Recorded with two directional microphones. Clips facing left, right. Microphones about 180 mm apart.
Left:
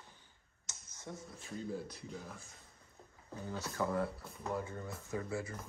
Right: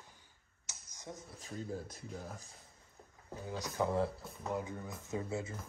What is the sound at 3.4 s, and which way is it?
Speech, 15° right (ahead or behind).